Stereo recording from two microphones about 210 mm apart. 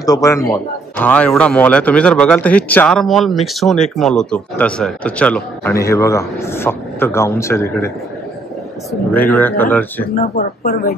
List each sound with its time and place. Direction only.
0.0 s a man's voice: 15° left (ahead or behind)
9.1 s a man's voice: 10° left (ahead or behind)
10.1 s speech: 40° left (ahead or behind)